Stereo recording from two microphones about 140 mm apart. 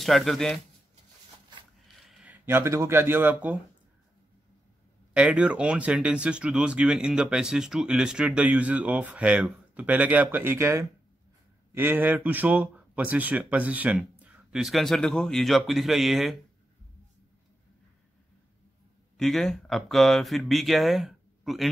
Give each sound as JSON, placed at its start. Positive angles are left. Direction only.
{"t": 0.0, "sound": "speech", "side_deg": 0}
{"t": 2.0, "sound": "a sound", "side_deg": 0}
{"t": 2.3, "sound": "speech", "side_deg": -15}
{"t": 5.1, "sound": "speech", "side_deg": -5}
{"t": 19.1, "sound": "speech", "side_deg": 5}